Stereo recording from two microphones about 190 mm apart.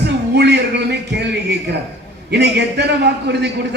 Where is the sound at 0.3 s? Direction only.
60° right (ahead or behind).